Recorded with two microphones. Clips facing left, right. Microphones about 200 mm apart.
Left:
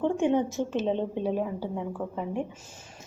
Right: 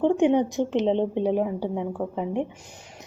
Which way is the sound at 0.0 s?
15° right (ahead or behind).